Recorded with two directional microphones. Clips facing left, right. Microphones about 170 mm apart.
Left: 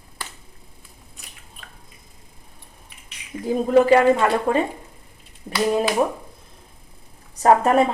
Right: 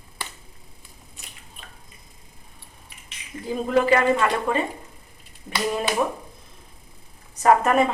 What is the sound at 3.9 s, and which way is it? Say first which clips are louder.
Speech: left 4 dB; 35° left (ahead or behind).